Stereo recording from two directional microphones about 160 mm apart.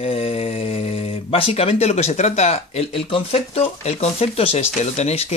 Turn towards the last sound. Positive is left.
turn(degrees=40)  # may be behind; listen again after turning